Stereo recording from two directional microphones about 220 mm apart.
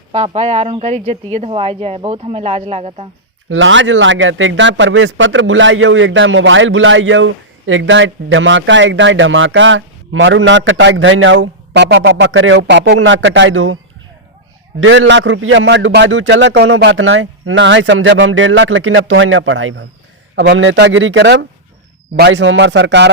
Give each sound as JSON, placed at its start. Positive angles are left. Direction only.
{"t": 0.1, "sound": "a woman's voice", "side_deg": -30}
{"t": 3.5, "sound": "speech", "side_deg": -60}
{"t": 14.8, "sound": "a man's voice", "side_deg": -60}